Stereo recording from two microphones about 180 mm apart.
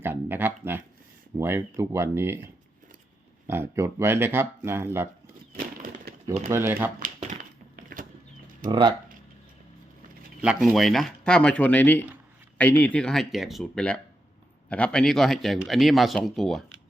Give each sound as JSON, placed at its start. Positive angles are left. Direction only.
{"t": 0.0, "sound": "speech", "side_deg": -10}
{"t": 3.4, "sound": "speech", "side_deg": -10}
{"t": 5.5, "sound": "a sound", "side_deg": -50}
{"t": 6.5, "sound": "speech", "side_deg": -15}
{"t": 7.8, "sound": "a sound", "side_deg": -50}
{"t": 8.7, "sound": "speech", "side_deg": -25}
{"t": 10.4, "sound": "speech", "side_deg": -5}